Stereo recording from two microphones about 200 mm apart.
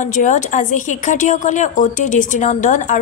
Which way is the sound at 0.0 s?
40° left (ahead or behind).